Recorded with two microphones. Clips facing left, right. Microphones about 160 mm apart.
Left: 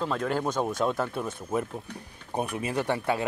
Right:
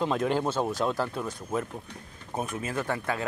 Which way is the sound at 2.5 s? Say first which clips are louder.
Left 3 dB; 15° left (ahead or behind).